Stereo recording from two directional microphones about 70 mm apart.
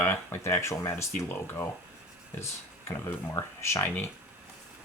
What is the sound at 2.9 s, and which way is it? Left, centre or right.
Speech, left.